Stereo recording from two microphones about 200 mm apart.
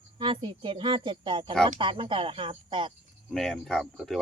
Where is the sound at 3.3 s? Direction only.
Centre (ahead or behind).